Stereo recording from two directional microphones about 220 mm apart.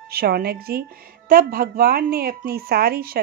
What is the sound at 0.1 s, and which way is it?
A woman's voice, 45° right (ahead or behind).